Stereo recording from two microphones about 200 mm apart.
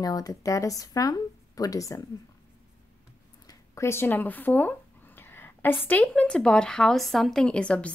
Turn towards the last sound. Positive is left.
turn(degrees=5)  # may be behind; listen again after turning